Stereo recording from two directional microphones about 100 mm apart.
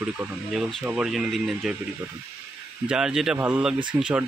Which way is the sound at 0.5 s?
Centre (ahead or behind).